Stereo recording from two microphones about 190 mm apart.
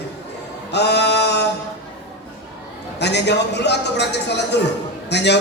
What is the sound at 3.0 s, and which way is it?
A man's voice, 65° left (ahead or behind).